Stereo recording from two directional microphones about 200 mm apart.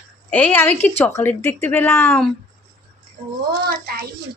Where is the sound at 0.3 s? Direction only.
10° left (ahead or behind).